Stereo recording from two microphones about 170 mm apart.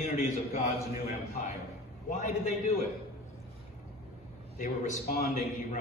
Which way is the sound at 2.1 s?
45° left (ahead or behind).